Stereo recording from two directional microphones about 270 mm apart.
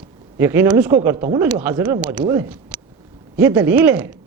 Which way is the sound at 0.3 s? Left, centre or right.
Centre.